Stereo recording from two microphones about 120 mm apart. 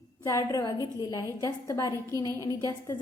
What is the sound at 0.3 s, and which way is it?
A woman's voice, 25° left (ahead or behind).